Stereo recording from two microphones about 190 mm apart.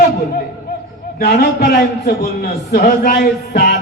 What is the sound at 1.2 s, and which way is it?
Speech, 60° left (ahead or behind).